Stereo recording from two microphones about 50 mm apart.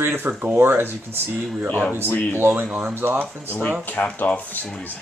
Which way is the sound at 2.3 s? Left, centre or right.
Right.